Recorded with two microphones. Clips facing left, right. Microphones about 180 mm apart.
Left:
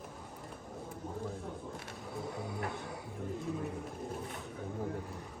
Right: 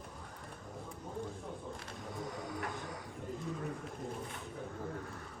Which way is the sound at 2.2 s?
Centre (ahead or behind).